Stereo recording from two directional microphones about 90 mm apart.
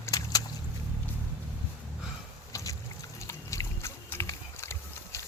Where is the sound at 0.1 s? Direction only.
45° left (ahead or behind).